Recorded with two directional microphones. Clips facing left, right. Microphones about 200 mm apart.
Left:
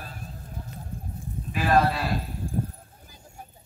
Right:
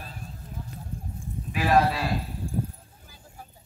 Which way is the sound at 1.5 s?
5° right (ahead or behind).